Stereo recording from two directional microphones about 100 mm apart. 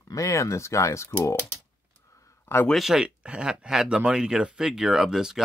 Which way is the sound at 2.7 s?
Centre (ahead or behind).